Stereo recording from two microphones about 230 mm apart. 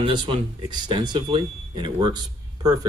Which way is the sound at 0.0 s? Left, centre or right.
Right.